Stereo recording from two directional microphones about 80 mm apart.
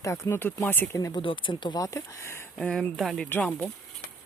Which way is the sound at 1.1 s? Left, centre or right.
Left.